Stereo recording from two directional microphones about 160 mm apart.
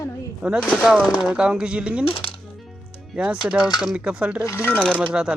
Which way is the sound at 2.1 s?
35° left (ahead or behind).